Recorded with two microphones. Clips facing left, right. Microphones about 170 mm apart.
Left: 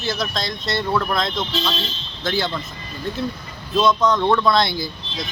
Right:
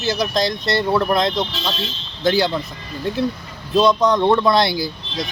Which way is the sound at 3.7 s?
15° right (ahead or behind).